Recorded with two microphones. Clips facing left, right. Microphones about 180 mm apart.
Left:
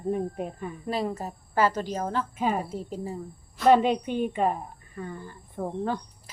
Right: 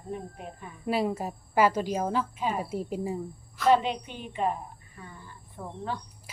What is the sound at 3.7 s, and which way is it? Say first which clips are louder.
A woman's voice: left 4 dB; 50° left (ahead or behind).